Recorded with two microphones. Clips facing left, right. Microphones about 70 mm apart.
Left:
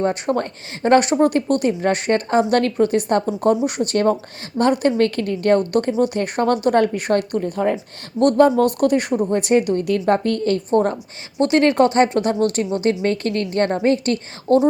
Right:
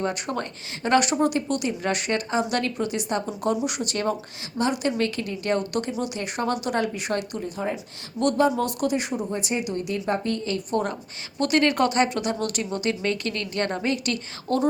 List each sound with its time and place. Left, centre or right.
0.0 s a woman's voice: left
10.7 s a woman's voice: left